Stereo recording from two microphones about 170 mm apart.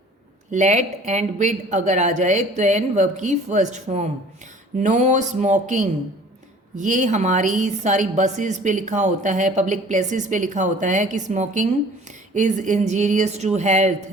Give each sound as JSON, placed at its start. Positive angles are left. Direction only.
{"t": 0.5, "sound": "speech", "side_deg": -45}